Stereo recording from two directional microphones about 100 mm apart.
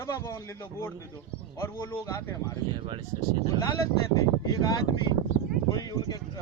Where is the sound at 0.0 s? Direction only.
35° left (ahead or behind).